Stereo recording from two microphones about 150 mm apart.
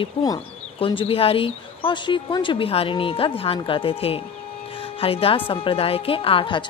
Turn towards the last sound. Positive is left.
turn(degrees=35)  # may be behind; listen again after turning